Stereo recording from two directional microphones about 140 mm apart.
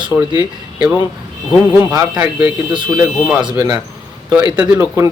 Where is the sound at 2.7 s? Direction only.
35° right (ahead or behind).